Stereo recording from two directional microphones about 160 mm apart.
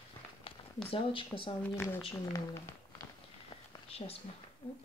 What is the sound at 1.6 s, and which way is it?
Speech, 10° left (ahead or behind).